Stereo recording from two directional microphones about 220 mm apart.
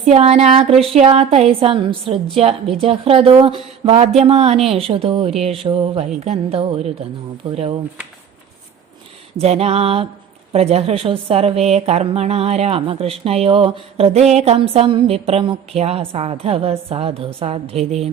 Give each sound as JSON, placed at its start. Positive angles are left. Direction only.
{"t": 0.0, "sound": "a woman's voice", "side_deg": -30}
{"t": 9.4, "sound": "a woman's voice", "side_deg": -30}